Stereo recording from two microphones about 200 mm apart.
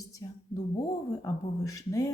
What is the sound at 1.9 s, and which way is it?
Speech, 15° left (ahead or behind).